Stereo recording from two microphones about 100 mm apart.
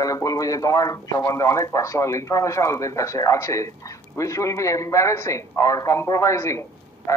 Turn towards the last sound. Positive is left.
turn(degrees=30)  # may be behind; listen again after turning